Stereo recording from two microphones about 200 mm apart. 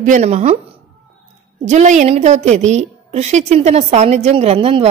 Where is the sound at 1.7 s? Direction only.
35° right (ahead or behind).